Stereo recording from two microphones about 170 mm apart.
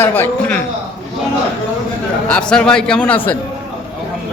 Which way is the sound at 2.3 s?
5° left (ahead or behind).